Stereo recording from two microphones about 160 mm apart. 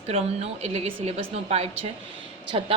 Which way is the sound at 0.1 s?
40° right (ahead or behind).